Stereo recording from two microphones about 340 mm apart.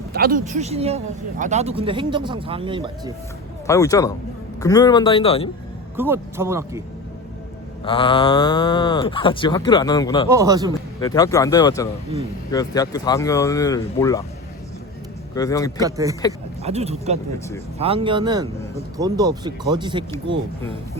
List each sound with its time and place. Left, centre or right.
0.1 s speech: right
3.7 s speech: centre
6.0 s speech: centre
7.9 s speech: centre
10.2 s speech: centre
11.0 s speech: centre
15.4 s speech: centre
15.8 s speech: centre